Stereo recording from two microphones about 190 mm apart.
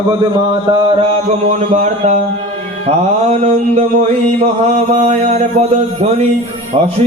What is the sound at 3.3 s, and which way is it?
Mantra, 40° right (ahead or behind).